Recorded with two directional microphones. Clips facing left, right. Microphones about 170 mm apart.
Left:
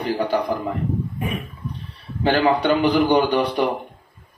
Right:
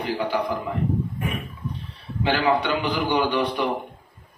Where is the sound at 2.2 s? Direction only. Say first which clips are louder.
Left 4 dB; 40° left (ahead or behind).